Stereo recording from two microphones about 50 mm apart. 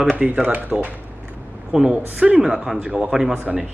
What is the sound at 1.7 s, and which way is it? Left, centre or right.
Speech, centre.